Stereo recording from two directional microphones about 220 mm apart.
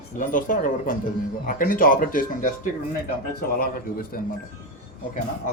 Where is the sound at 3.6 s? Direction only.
40° left (ahead or behind).